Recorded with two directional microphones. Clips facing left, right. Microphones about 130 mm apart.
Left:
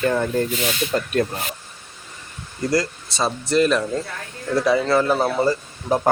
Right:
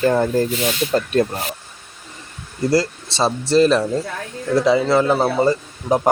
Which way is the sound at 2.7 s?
30° right (ahead or behind).